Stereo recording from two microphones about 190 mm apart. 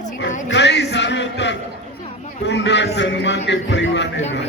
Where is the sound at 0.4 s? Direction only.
65° left (ahead or behind).